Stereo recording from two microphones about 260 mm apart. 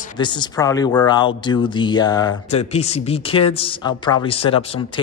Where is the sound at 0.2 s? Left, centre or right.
Centre.